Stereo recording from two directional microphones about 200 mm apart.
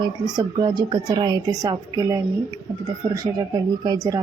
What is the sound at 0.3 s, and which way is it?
A woman's voice, 20° right (ahead or behind).